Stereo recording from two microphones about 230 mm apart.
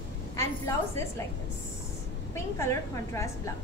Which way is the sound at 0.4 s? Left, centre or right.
Centre.